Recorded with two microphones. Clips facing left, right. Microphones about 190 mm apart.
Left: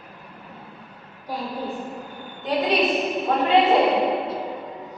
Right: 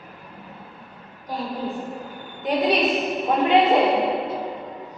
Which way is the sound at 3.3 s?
15° right (ahead or behind).